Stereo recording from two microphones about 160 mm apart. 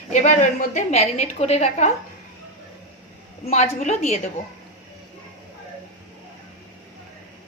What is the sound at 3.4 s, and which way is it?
Speech, 45° left (ahead or behind).